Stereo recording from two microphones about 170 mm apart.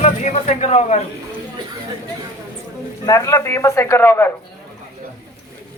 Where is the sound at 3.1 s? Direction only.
20° left (ahead or behind).